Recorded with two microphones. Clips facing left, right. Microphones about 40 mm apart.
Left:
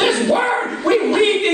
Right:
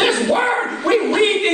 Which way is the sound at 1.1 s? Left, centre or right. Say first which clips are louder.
Left 1 dB; centre.